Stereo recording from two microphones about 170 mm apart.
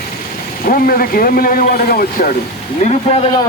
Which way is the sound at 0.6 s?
60° left (ahead or behind).